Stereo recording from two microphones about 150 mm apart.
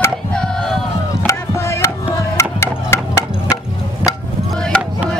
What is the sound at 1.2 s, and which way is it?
Music, 20° left (ahead or behind).